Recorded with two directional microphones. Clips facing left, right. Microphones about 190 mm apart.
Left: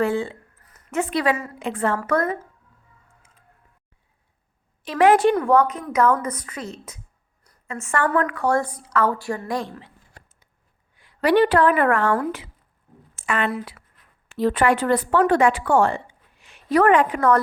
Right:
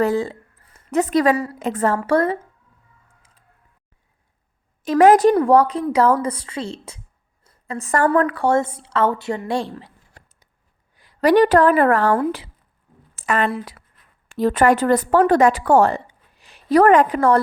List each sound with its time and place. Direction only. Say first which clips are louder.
0.0 s a woman's voice: right 3 dB; 40° right (ahead or behind)
2.0 s a woman's voice: right 4 dB; 30° right (ahead or behind)
4.8 s a woman's voice: right 4 dB; 45° right (ahead or behind)